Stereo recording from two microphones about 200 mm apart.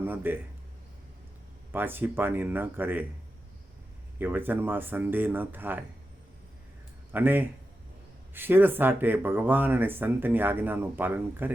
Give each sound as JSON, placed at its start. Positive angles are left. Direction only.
{"t": 0.0, "sound": "speech", "side_deg": -10}
{"t": 1.7, "sound": "speech", "side_deg": -10}
{"t": 4.2, "sound": "speech", "side_deg": -10}
{"t": 7.1, "sound": "speech", "side_deg": -10}